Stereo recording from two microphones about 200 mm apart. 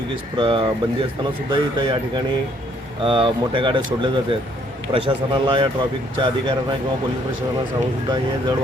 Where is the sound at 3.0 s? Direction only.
25° right (ahead or behind).